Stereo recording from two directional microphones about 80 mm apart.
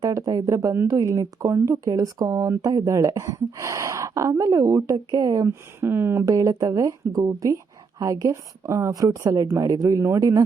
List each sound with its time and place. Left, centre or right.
0.0 s speech: right
5.5 s speech: right
6.2 s speech: right